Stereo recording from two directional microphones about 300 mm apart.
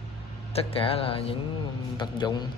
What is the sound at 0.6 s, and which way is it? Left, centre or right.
A man's voice, centre.